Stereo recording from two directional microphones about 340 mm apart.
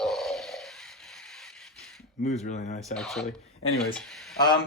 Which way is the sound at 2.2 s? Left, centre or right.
Left.